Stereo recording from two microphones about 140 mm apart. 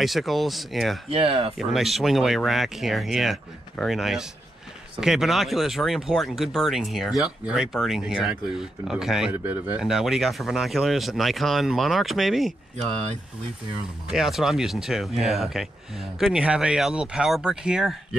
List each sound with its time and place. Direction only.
0.0 s speech: centre (ahead or behind)
1.1 s speech: 45° right (ahead or behind)
1.6 s speech: centre (ahead or behind)
14.1 s speech: centre (ahead or behind)